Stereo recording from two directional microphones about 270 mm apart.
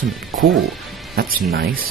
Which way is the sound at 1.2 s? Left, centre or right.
Right.